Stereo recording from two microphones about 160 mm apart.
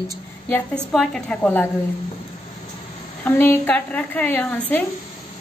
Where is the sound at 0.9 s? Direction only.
5° left (ahead or behind).